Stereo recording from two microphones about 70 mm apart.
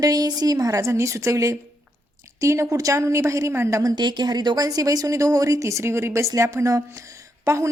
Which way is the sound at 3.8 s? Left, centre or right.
Right.